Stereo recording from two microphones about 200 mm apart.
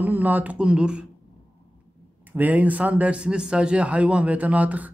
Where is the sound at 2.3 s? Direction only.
10° right (ahead or behind).